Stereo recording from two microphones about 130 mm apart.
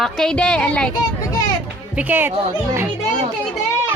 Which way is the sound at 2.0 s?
15° right (ahead or behind).